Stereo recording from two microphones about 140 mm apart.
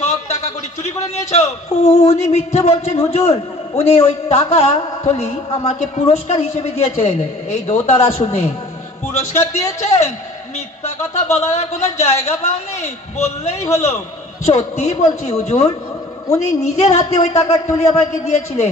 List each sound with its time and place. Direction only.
0.8 s a man's voice: 50° left (ahead or behind)
11.3 s a man's voice: 50° left (ahead or behind)